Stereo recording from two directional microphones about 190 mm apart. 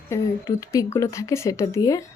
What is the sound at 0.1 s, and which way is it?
Speech, 15° left (ahead or behind).